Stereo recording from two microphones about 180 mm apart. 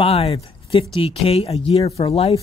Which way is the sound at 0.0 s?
35° left (ahead or behind).